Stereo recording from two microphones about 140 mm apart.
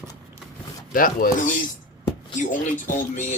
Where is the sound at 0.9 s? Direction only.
85° left.